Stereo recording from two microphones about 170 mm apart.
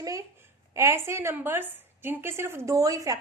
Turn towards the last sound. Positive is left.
turn(degrees=-20)  # may be behind; listen again after turning